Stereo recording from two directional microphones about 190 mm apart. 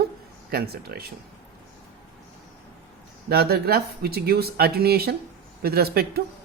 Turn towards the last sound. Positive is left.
turn(degrees=-55)  # may be behind; listen again after turning